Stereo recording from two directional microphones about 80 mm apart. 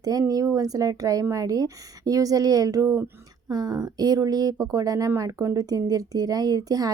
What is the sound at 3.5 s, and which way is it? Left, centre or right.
Speech, right.